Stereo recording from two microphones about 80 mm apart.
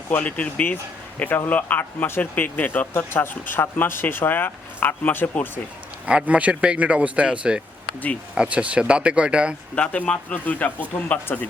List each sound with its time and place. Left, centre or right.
0.1 s speech: centre
6.1 s speech: centre
9.7 s speech: centre